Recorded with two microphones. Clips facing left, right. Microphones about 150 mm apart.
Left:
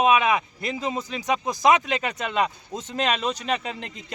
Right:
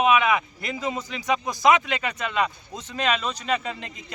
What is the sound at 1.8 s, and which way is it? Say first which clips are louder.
A man's voice: left 1 dB; 35° left (ahead or behind).